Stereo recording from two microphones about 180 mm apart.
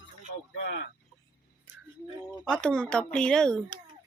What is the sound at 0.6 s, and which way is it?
Speech, 75° left (ahead or behind).